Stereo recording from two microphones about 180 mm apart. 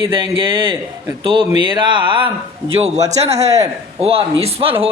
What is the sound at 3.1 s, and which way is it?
Speech, 35° right (ahead or behind).